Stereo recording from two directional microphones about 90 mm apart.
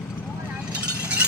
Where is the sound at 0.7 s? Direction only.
15° right (ahead or behind).